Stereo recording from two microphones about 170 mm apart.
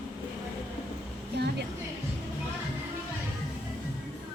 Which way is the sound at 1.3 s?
80° right.